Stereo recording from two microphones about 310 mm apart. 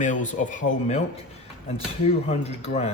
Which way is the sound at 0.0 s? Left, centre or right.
Left.